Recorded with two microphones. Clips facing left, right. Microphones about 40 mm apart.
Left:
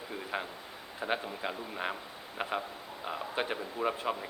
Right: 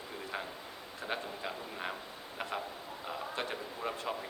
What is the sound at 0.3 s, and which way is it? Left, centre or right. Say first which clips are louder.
Speech: left 4 dB; left.